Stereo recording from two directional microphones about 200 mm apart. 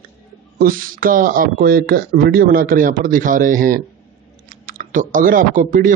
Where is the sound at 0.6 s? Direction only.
45° right (ahead or behind).